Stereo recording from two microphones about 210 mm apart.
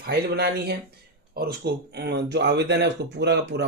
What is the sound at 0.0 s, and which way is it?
Speech, 50° right (ahead or behind).